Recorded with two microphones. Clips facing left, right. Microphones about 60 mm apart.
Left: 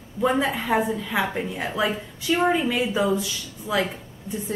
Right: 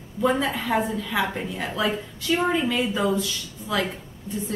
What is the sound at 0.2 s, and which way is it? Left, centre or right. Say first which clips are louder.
A woman's voice: left 1 dB; centre.